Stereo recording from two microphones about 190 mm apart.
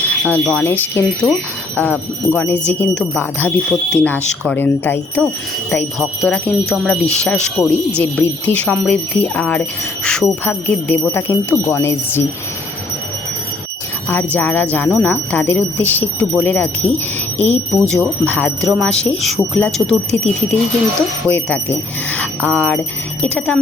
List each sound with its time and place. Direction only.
0.0 s speech: 5° left (ahead or behind)
14.3 s speech: 10° left (ahead or behind)
17.3 s speech: 35° left (ahead or behind)
17.7 s speech: 5° left (ahead or behind)
21.2 s speech: 10° left (ahead or behind)